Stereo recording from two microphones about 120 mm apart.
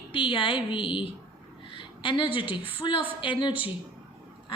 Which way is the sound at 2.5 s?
50° left (ahead or behind).